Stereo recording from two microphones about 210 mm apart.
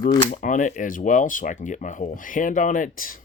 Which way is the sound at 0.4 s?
40° left (ahead or behind).